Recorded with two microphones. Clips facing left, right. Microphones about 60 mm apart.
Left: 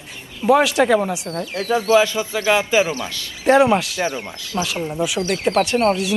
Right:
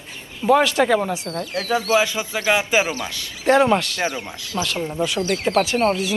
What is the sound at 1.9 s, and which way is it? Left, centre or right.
Speech, right.